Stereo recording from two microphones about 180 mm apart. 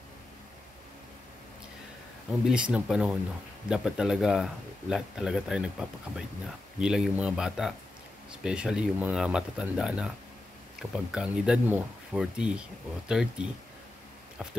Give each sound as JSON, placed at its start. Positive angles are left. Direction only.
{"t": 2.4, "sound": "speech", "side_deg": -5}